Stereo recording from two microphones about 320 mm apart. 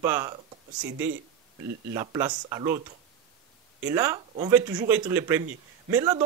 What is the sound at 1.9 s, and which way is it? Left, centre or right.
Speech, centre.